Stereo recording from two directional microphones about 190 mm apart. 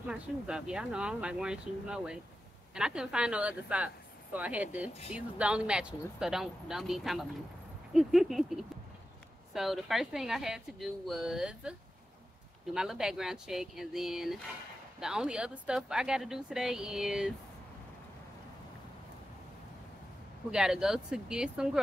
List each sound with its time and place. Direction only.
0.0 s speech: 5° right (ahead or behind)
7.9 s a sound: centre (ahead or behind)
9.5 s speech: centre (ahead or behind)
12.7 s speech: 5° right (ahead or behind)
20.5 s speech: 5° right (ahead or behind)